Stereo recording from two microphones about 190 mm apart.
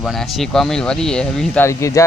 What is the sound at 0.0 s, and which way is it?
Speech, centre (ahead or behind).